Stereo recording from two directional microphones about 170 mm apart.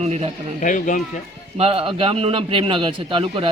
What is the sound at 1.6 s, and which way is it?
Speech, 35° right (ahead or behind).